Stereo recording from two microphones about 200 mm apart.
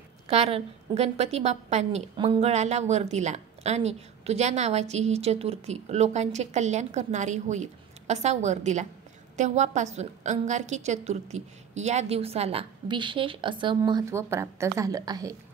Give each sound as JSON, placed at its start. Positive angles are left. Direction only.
{"t": 0.3, "sound": "a woman's voice", "side_deg": -30}